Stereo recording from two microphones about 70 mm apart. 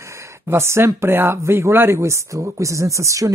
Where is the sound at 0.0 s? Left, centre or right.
Right.